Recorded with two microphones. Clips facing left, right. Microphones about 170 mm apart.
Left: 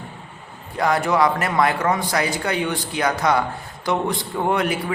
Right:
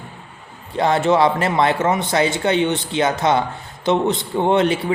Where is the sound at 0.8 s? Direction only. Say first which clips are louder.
Right 3 dB; 25° right (ahead or behind).